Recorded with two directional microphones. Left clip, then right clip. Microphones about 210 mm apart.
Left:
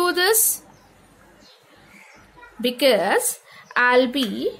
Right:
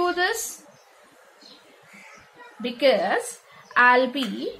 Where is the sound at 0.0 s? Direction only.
55° left (ahead or behind).